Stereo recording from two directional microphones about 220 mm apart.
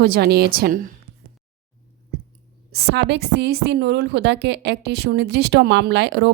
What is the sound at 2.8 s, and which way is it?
A woman's voice, 50° right (ahead or behind).